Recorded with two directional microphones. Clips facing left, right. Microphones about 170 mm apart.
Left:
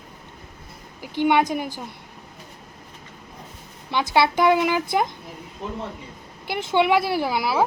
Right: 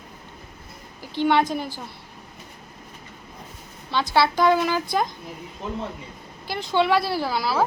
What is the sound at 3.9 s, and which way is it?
A woman's voice, 15° left (ahead or behind).